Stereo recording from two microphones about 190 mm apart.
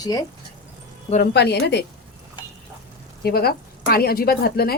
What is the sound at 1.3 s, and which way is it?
Speech, 60° left (ahead or behind).